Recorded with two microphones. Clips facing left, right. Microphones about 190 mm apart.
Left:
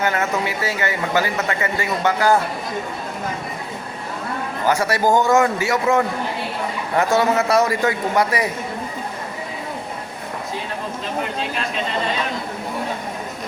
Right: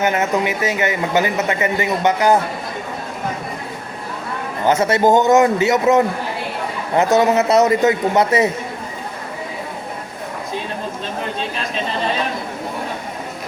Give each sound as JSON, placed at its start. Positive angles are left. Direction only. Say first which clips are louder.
{"t": 0.0, "sound": "speech", "louder": "right 3 dB", "side_deg": -20}
{"t": 4.6, "sound": "speech", "louder": "right 4 dB", "side_deg": -20}